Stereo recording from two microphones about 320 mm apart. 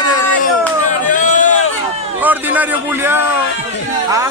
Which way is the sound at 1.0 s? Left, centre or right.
Left.